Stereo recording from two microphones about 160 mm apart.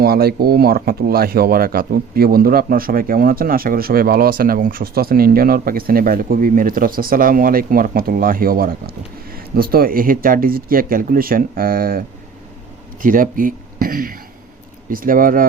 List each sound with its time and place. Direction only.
0.0 s speech: 75° right (ahead or behind)